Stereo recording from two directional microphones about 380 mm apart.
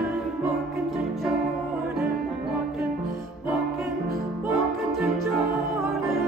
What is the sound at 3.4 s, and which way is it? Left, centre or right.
Music, centre.